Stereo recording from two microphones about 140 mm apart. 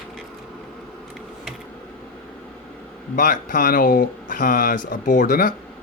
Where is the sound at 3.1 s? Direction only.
75° left (ahead or behind).